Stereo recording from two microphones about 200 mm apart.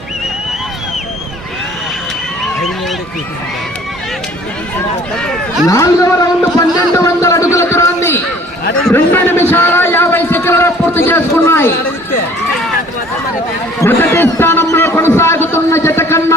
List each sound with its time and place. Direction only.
5.1 s speech: 5° left (ahead or behind)
5.6 s a man's voice: 15° left (ahead or behind)
6.6 s a sound: 15° left (ahead or behind)
8.9 s a man's voice: 10° left (ahead or behind)
13.8 s a man's voice: 10° left (ahead or behind)